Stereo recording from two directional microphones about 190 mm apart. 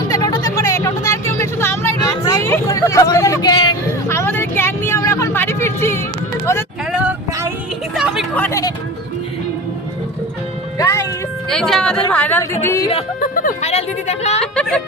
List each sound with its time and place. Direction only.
0.1 s vehicle: 20° left (ahead or behind)
6.4 s a sound: 15° left (ahead or behind)
6.9 s vehicle: 5° right (ahead or behind)
8.4 s a sound: 15° left (ahead or behind)
10.8 s music: 15° left (ahead or behind)
11.4 s music: 5° left (ahead or behind)
12.6 s speech: 15° left (ahead or behind)
13.3 s music: 50° left (ahead or behind)
13.7 s a woman's voice: 35° left (ahead or behind)
14.4 s music: 5° left (ahead or behind)